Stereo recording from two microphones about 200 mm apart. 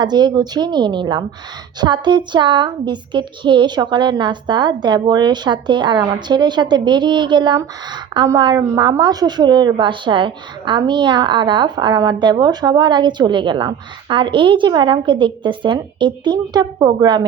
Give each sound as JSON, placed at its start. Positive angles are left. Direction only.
{"t": 0.0, "sound": "a woman's voice", "side_deg": -20}